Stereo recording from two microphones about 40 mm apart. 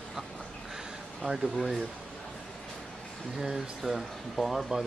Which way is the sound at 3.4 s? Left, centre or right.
Centre.